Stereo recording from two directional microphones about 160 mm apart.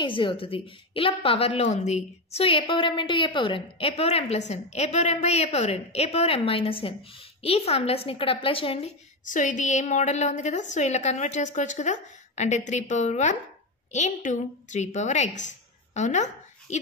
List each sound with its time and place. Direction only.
0.0 s a woman's voice: 30° left (ahead or behind)
9.2 s a woman's voice: 55° left (ahead or behind)